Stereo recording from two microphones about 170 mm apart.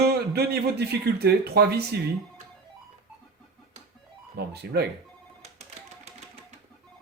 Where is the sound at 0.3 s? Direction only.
70° right (ahead or behind).